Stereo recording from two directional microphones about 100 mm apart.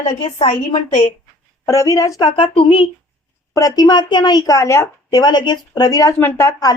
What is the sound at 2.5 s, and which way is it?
Speech, 65° left (ahead or behind).